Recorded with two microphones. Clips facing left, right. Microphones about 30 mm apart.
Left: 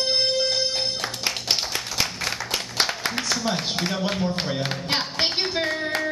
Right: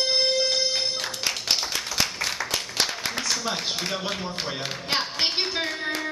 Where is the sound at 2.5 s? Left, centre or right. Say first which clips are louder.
Left 2 dB; left.